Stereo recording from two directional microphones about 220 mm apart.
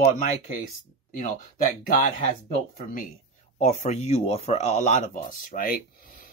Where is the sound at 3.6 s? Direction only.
30° left (ahead or behind).